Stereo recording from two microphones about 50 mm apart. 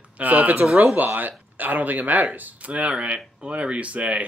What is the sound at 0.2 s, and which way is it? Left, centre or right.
Speech, right.